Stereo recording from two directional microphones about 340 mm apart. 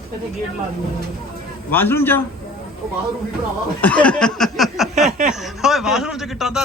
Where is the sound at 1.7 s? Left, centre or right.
Centre.